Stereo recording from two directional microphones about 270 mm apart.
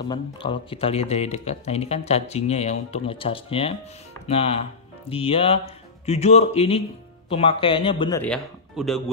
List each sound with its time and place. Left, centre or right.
0.1 s speech: centre
8.2 s speech: centre